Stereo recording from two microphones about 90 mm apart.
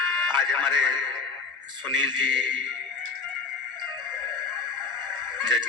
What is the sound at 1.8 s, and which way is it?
Speech, 60° right (ahead or behind).